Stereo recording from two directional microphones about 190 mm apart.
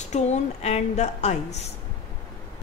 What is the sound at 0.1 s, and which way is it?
A woman's voice, 35° left (ahead or behind).